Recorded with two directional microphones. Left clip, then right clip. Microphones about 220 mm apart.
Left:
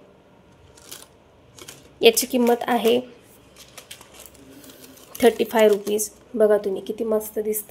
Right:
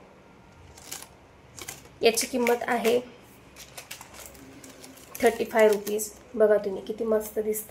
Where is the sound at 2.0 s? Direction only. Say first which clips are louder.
Left 7 dB; 40° left (ahead or behind).